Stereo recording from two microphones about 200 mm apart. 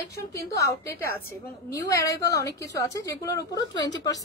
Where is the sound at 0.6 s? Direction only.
15° left (ahead or behind).